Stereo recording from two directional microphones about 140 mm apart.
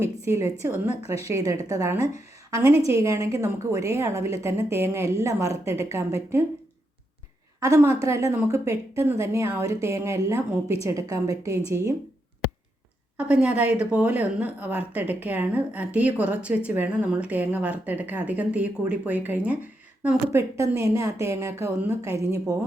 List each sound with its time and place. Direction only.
0.0 s a woman's voice: 20° right (ahead or behind)
7.6 s a woman's voice: 25° right (ahead or behind)
13.1 s speech: 10° right (ahead or behind)